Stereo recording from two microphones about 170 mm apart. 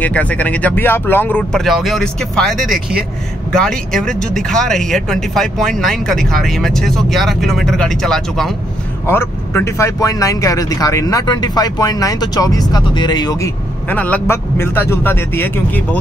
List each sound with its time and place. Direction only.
0.0 s speech: 10° left (ahead or behind)
9.0 s speech: 15° left (ahead or behind)
13.8 s speech: 10° left (ahead or behind)